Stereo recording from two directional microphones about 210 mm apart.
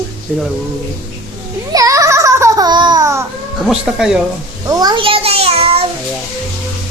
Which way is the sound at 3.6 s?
Centre (ahead or behind).